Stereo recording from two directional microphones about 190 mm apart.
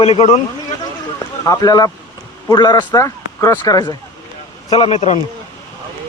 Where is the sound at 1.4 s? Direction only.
20° left (ahead or behind).